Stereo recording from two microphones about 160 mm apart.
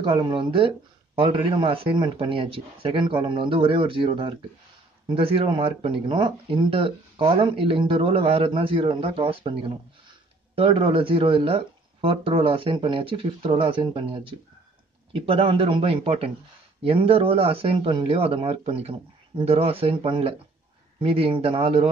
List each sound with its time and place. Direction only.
0.0 s speech: 30° right (ahead or behind)